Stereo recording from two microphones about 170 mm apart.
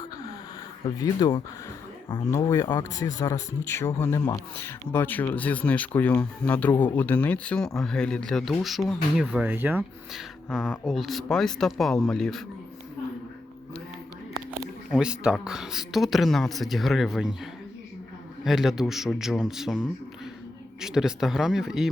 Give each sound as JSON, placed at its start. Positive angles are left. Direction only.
{"t": 0.9, "sound": "speech", "side_deg": 20}
{"t": 10.5, "sound": "speech", "side_deg": 0}
{"t": 14.6, "sound": "speech", "side_deg": -5}
{"t": 20.8, "sound": "speech", "side_deg": -5}